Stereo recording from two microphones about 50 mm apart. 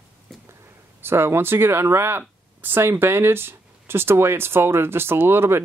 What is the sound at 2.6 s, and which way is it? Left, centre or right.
Speech, right.